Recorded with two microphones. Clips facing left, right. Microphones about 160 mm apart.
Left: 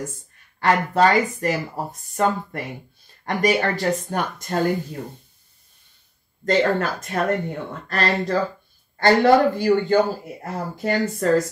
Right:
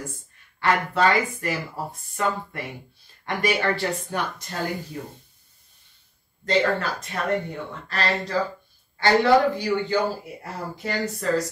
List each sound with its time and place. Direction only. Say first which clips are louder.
0.6 s speech: left 4 dB; 40° left (ahead or behind)
6.4 s speech: left 3 dB; 50° left (ahead or behind)